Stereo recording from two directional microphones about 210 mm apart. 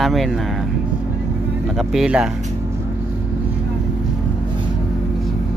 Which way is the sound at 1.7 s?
5° right (ahead or behind).